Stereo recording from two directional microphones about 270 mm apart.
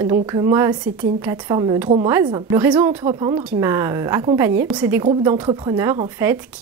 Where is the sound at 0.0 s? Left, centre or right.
Centre.